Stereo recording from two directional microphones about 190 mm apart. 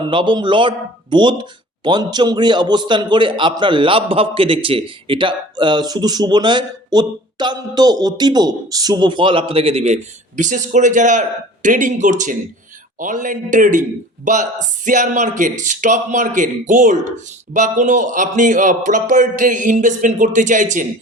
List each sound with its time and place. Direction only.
0.1 s a man's voice: 25° right (ahead or behind); by 20.8 s 40° right (ahead or behind)